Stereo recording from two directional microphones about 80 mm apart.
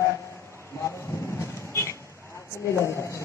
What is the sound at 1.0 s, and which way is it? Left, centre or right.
Vehicle, left.